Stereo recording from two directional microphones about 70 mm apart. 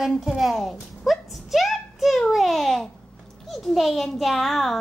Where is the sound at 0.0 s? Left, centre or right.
Centre.